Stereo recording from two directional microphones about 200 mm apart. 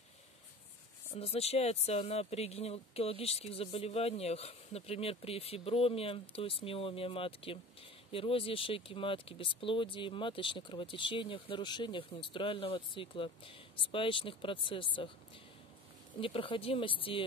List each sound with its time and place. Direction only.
1.1 s speech: 30° left (ahead or behind)
16.2 s speech: 25° left (ahead or behind)